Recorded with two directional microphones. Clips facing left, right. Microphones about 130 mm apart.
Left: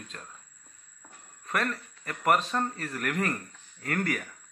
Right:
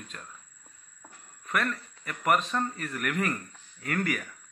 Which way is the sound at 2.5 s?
35° left (ahead or behind).